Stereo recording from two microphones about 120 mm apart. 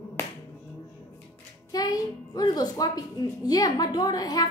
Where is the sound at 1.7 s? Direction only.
30° left (ahead or behind).